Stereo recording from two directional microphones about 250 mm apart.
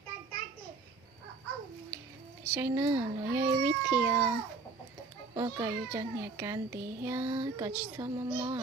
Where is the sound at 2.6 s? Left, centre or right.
Centre.